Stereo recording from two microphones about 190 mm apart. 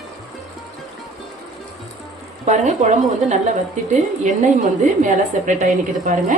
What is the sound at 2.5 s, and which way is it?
Speech, 40° right (ahead or behind).